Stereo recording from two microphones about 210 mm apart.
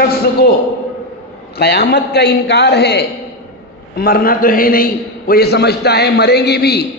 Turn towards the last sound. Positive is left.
turn(degrees=50)  # may be behind; listen again after turning